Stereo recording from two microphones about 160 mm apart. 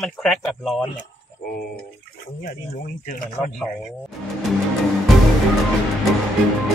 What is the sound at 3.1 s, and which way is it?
Speech, 60° left (ahead or behind).